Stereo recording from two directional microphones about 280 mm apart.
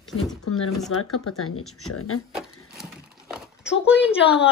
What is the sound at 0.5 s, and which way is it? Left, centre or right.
Speech, left.